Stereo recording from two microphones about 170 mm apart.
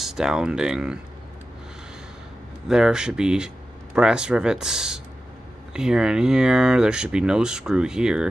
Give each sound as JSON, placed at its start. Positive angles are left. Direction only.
{"t": 0.0, "sound": "speech", "side_deg": -5}
{"t": 2.7, "sound": "speech", "side_deg": -5}